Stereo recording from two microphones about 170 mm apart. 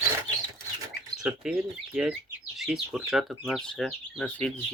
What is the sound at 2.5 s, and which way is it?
Speech, 5° right (ahead or behind).